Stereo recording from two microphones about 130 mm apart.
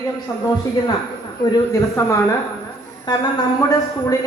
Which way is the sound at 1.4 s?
25° left (ahead or behind).